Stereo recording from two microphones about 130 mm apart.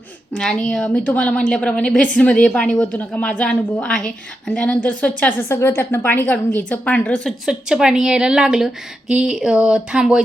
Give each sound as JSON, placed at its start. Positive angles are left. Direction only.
{"t": 0.3, "sound": "a woman's voice", "side_deg": 5}
{"t": 7.4, "sound": "a woman's voice", "side_deg": -5}